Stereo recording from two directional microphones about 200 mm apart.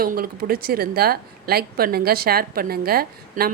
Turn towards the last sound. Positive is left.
turn(degrees=-50)  # may be behind; listen again after turning